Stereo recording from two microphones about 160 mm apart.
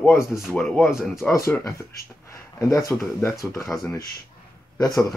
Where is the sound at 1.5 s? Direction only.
20° left (ahead or behind).